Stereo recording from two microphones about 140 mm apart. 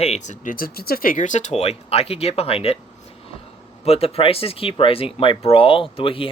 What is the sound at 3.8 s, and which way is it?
Speech, 45° left (ahead or behind).